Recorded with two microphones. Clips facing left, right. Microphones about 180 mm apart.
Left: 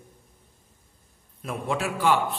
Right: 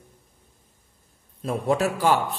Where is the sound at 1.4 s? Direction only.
35° right (ahead or behind).